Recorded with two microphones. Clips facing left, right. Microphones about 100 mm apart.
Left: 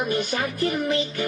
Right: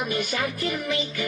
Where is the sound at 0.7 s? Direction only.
30° left (ahead or behind).